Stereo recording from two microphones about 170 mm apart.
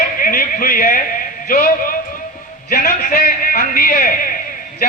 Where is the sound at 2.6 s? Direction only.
50° left (ahead or behind).